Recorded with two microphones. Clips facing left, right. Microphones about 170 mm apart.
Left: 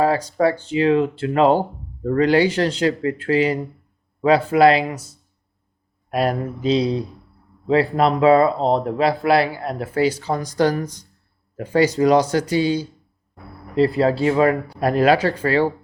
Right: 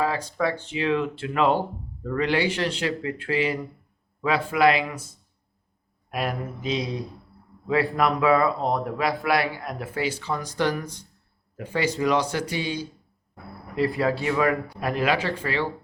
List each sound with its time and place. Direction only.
0.0 s speech: 35° left (ahead or behind)
6.1 s speech: 35° left (ahead or behind)